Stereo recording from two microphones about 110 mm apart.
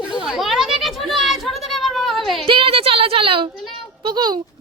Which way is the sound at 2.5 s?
55° right (ahead or behind).